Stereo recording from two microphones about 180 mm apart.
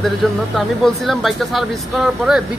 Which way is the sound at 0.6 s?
Centre (ahead or behind).